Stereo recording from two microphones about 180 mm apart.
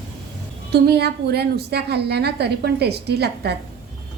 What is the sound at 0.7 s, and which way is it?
A woman's voice, 65° right (ahead or behind).